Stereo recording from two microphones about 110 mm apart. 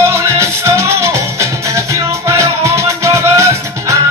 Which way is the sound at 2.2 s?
25° right (ahead or behind).